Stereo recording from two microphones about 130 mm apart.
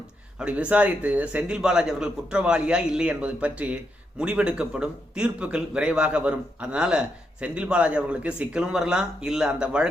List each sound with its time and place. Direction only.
0.3 s a man's voice: 10° right (ahead or behind)